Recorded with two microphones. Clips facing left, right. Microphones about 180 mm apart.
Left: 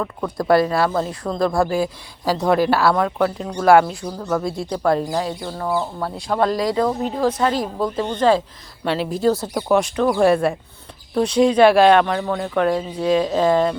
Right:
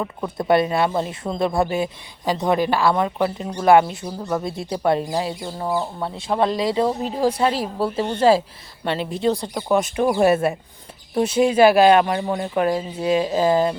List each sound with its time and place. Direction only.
0.0 s speech: 15° right (ahead or behind)
0.4 s speech: centre (ahead or behind)
2.9 s speech: 5° right (ahead or behind)
6.6 s speech: 25° right (ahead or behind)
7.2 s speech: 10° right (ahead or behind)